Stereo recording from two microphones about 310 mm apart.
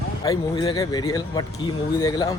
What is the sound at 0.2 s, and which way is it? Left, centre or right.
Speech, centre.